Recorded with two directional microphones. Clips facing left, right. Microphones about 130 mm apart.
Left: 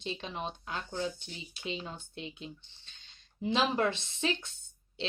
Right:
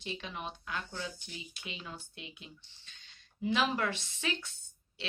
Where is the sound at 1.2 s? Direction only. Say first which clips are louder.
Left 6 dB; 30° left (ahead or behind).